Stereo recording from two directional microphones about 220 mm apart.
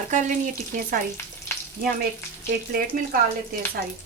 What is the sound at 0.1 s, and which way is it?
Speech, 35° right (ahead or behind).